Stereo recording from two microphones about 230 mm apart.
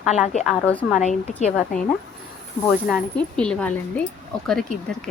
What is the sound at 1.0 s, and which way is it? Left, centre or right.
Speech, left.